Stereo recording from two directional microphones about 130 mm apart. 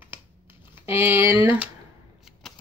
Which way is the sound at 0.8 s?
20° right (ahead or behind).